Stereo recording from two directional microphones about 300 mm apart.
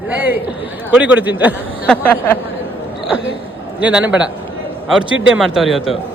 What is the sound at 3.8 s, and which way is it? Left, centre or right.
Speech, centre.